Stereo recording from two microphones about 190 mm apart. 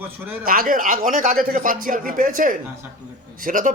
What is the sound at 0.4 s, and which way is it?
Speech, 50° right (ahead or behind).